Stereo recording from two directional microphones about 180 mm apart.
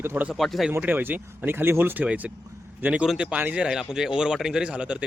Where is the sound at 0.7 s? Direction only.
10° right (ahead or behind).